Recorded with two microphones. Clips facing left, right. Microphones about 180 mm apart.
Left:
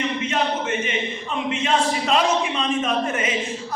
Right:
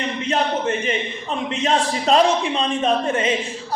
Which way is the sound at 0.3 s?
35° right (ahead or behind).